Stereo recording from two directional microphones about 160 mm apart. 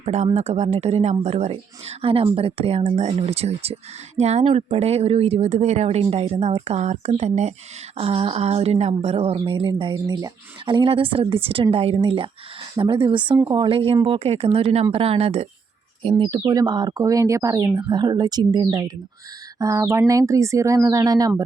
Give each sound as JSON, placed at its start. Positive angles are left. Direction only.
{"t": 0.0, "sound": "speech", "side_deg": -45}